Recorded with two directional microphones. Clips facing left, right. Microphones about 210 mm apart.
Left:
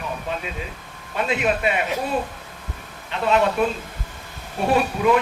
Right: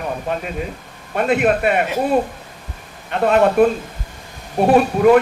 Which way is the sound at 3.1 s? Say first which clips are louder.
Right 5 dB; 50° right (ahead or behind).